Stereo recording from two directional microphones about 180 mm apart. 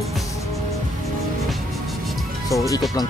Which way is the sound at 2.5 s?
20° left (ahead or behind).